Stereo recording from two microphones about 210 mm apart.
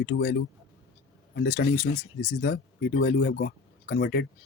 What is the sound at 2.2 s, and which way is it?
Speech, 55° left (ahead or behind).